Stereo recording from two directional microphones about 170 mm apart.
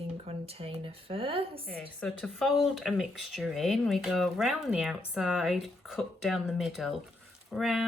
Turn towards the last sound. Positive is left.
turn(degrees=0)  # may be behind; listen again after turning